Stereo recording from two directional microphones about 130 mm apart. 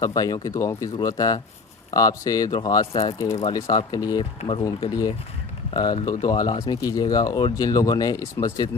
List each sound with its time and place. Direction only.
0.0 s speech: 30° left (ahead or behind)
4.2 s speech: 45° left (ahead or behind)
4.8 s speech: 30° left (ahead or behind)